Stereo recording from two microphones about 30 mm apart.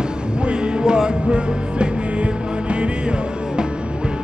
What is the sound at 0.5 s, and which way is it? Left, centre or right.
Music, right.